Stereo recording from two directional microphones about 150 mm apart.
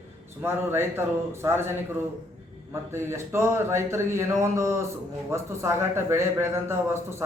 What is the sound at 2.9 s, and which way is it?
A man's voice, 15° right (ahead or behind).